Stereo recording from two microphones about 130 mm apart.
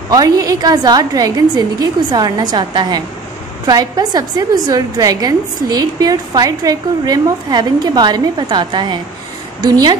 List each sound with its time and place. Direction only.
0.1 s a woman's voice: 25° right (ahead or behind)